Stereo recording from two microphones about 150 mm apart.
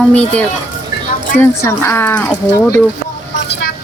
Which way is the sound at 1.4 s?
15° left (ahead or behind).